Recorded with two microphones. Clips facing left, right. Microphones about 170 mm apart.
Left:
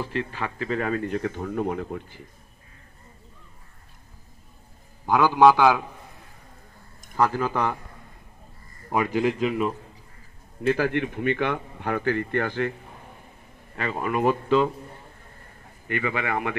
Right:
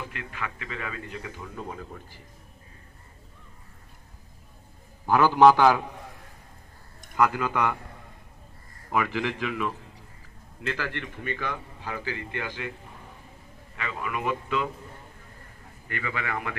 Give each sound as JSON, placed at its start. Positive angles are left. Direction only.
{"t": 0.0, "sound": "speech", "side_deg": 30}
{"t": 5.0, "sound": "a man's voice", "side_deg": 15}
{"t": 7.2, "sound": "a man's voice", "side_deg": 30}
{"t": 8.9, "sound": "a man's voice", "side_deg": 35}
{"t": 10.7, "sound": "speech", "side_deg": 50}
{"t": 13.7, "sound": "a man's voice", "side_deg": 45}
{"t": 16.2, "sound": "speech", "side_deg": 20}